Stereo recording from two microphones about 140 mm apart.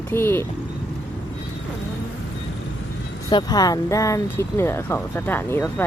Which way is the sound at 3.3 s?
30° left (ahead or behind).